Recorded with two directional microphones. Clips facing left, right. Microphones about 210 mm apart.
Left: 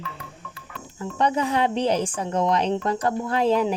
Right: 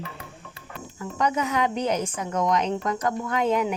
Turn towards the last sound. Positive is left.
turn(degrees=30)  # may be behind; listen again after turning